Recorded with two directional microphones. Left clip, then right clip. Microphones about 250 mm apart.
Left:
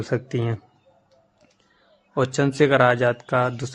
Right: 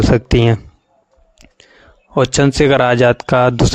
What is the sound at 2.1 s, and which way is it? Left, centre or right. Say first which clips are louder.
Speech: right 9 dB; right.